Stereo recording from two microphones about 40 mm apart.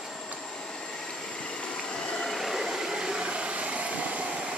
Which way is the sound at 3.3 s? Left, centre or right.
Right.